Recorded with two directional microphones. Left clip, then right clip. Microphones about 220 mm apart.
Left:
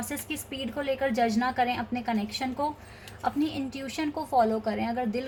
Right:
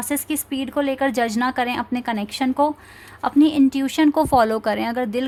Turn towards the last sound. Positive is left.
turn(degrees=-45)  # may be behind; listen again after turning